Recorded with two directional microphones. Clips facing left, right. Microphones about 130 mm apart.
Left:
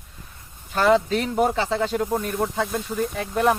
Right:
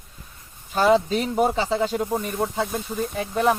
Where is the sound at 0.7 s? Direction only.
10° right (ahead or behind).